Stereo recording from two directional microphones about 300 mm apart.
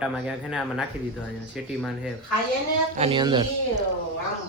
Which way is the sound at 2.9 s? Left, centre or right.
Centre.